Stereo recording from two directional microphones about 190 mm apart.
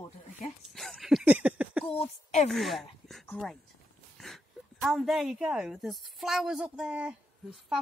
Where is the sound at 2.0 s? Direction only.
35° left (ahead or behind).